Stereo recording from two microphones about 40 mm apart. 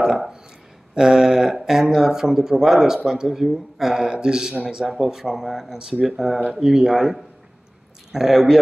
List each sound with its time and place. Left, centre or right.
0.9 s speech: centre
4.1 s speech: right
4.6 s speech: centre